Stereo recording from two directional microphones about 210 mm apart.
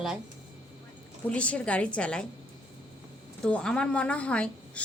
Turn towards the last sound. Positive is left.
turn(degrees=5)  # may be behind; listen again after turning